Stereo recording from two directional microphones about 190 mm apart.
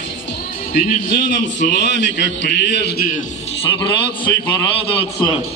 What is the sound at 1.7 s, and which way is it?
A man's voice, 65° left (ahead or behind).